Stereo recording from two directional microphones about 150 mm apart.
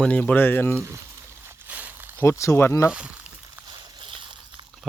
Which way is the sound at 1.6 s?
10° right (ahead or behind).